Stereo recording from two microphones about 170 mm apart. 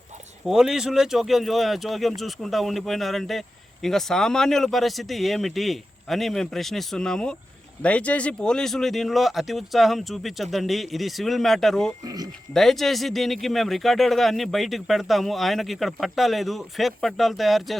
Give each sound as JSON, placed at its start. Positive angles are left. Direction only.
{"t": 0.4, "sound": "speech", "side_deg": -5}
{"t": 12.0, "sound": "speech", "side_deg": -20}
{"t": 12.5, "sound": "speech", "side_deg": 0}